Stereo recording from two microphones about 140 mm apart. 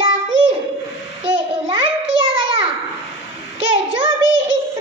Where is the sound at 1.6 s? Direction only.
35° right (ahead or behind).